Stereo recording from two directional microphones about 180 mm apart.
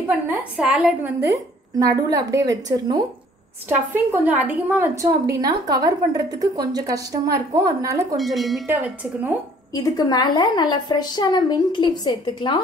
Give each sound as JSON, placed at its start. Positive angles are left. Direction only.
{"t": 0.0, "sound": "a woman's voice", "side_deg": -10}
{"t": 1.2, "sound": "a woman's voice", "side_deg": -20}
{"t": 8.2, "sound": "a woman's voice", "side_deg": 0}
{"t": 9.8, "sound": "a woman's voice", "side_deg": 20}